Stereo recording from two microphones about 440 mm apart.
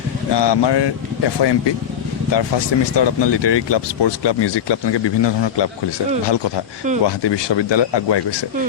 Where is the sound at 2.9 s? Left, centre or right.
Left.